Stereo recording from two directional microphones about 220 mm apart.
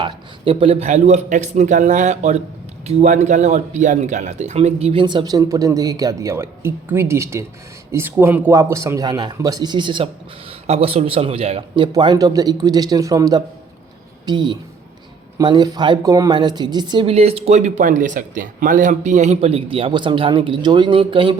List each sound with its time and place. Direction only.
0.0 s a man's voice: 25° right (ahead or behind)